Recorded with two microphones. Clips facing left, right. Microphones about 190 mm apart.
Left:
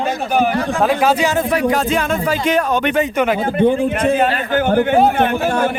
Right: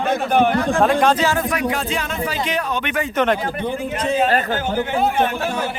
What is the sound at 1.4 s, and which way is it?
Music, 35° left (ahead or behind).